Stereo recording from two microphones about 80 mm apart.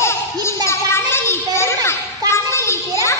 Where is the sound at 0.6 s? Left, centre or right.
Left.